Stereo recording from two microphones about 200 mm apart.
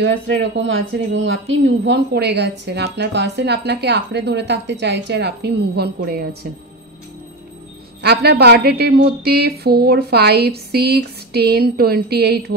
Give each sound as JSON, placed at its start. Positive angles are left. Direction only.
{"t": 0.4, "sound": "speech", "side_deg": -65}
{"t": 8.0, "sound": "a woman's voice", "side_deg": -55}